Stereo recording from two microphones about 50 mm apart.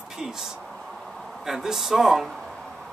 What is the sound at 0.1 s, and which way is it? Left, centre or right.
Speech, centre.